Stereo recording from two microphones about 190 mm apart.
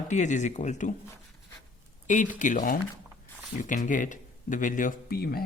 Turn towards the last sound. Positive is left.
turn(degrees=55)  # may be behind; listen again after turning